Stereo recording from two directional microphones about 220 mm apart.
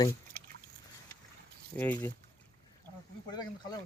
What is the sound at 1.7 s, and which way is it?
Speech, 5° left (ahead or behind).